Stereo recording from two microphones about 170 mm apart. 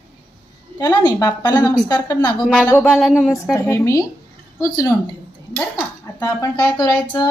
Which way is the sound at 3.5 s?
15° left (ahead or behind).